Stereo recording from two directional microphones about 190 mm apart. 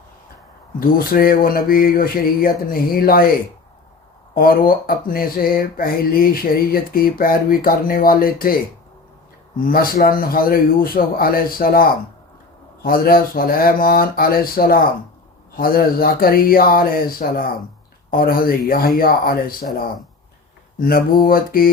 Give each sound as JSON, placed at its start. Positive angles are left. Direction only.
{"t": 0.8, "sound": "speech", "side_deg": 50}
{"t": 4.4, "sound": "speech", "side_deg": 50}
{"t": 9.6, "sound": "speech", "side_deg": 50}
{"t": 20.7, "sound": "speech", "side_deg": 50}